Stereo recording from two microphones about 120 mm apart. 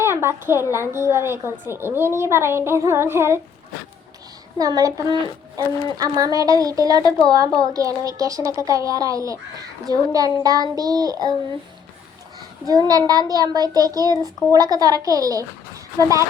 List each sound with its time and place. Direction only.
0.0 s a sound: 20° right (ahead or behind)
0.7 s a woman's voice: 20° right (ahead or behind)
4.5 s a woman's voice: 30° right (ahead or behind)
12.9 s a child's voice: 35° right (ahead or behind)